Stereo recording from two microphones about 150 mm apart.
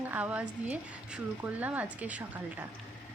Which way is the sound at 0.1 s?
10° right (ahead or behind).